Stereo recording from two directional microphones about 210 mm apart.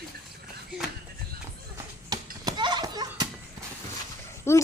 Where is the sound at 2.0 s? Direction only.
20° right (ahead or behind).